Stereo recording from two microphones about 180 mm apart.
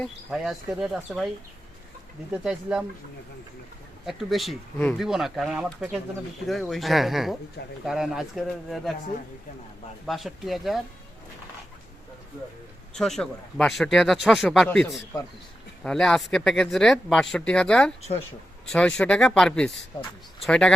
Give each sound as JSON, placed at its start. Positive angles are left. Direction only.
{"t": 0.0, "sound": "speech", "side_deg": 0}
{"t": 2.3, "sound": "speech", "side_deg": -5}
{"t": 4.0, "sound": "speech", "side_deg": 0}
{"t": 10.1, "sound": "speech", "side_deg": 0}
{"t": 12.9, "sound": "speech", "side_deg": 0}